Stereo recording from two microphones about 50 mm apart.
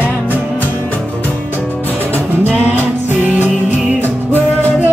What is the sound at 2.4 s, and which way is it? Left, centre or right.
Music, right.